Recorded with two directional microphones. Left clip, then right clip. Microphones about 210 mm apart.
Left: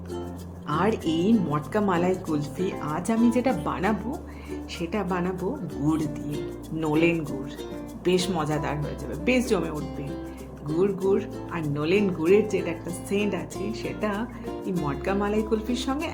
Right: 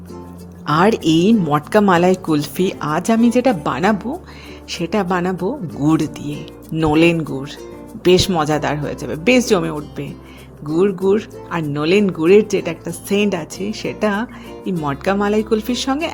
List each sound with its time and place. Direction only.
0.7 s speech: 45° right (ahead or behind)
10.8 s speech: 40° right (ahead or behind)